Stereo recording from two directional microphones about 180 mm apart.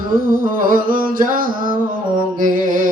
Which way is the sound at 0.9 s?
50° right (ahead or behind).